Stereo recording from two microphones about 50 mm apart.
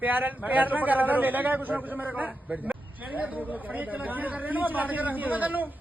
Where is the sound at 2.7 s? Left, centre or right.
Right.